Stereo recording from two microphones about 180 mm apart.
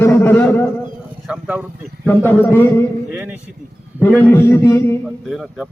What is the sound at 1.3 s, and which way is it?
Speech, 5° right (ahead or behind).